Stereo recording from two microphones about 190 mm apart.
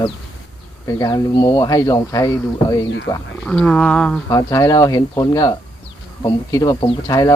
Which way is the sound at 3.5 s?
5° left (ahead or behind).